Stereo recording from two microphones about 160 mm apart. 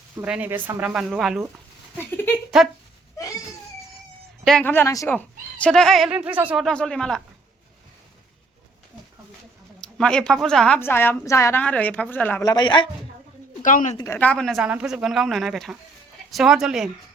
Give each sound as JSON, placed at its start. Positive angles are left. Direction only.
{"t": 0.2, "sound": "speech", "side_deg": -10}
{"t": 2.0, "sound": "a sound", "side_deg": 10}
{"t": 2.5, "sound": "speech", "side_deg": -5}
{"t": 4.4, "sound": "a woman's voice", "side_deg": 10}
{"t": 5.6, "sound": "speech", "side_deg": 5}
{"t": 6.1, "sound": "speech", "side_deg": -10}
{"t": 6.7, "sound": "speech", "side_deg": 5}
{"t": 9.8, "sound": "a woman's voice", "side_deg": 5}
{"t": 12.4, "sound": "speech", "side_deg": 25}
{"t": 13.6, "sound": "speech", "side_deg": 55}
{"t": 14.0, "sound": "speech", "side_deg": 15}